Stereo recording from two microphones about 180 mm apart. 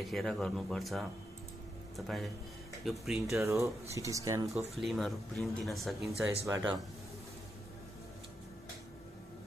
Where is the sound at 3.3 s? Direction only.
15° right (ahead or behind).